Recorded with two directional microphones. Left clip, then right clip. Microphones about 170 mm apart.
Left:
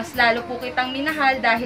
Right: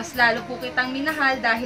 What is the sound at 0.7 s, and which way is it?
Speech, 20° left (ahead or behind).